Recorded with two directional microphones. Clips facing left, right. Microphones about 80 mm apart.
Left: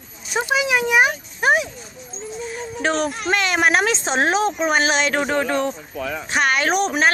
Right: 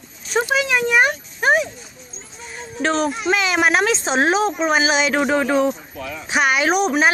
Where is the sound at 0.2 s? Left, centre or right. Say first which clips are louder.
Right 2 dB; centre.